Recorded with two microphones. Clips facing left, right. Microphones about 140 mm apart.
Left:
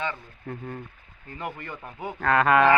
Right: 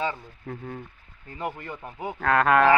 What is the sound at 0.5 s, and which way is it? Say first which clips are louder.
Speech: even; centre (ahead or behind).